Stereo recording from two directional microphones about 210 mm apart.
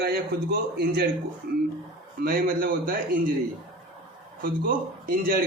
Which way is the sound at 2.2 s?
45° right (ahead or behind).